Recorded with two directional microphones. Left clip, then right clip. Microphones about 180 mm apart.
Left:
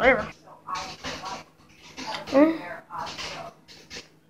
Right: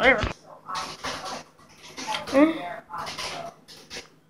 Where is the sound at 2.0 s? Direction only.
15° left (ahead or behind).